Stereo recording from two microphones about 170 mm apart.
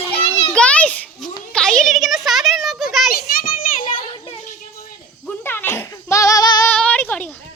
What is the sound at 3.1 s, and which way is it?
Children playing, 55° left (ahead or behind).